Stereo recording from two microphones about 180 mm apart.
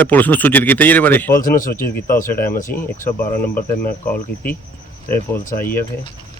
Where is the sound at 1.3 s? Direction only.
50° left (ahead or behind).